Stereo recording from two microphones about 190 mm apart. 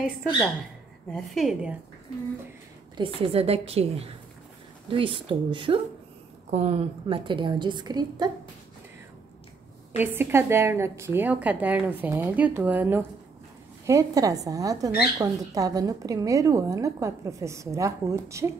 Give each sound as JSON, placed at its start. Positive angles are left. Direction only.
{"t": 1.1, "sound": "a woman's voice", "side_deg": 0}
{"t": 3.0, "sound": "a woman's voice", "side_deg": -30}
{"t": 9.9, "sound": "a woman's voice", "side_deg": -10}